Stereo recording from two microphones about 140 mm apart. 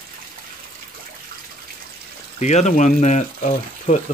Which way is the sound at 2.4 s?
55° left (ahead or behind).